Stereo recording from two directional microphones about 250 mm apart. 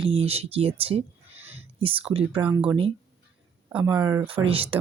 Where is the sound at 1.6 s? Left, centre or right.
Right.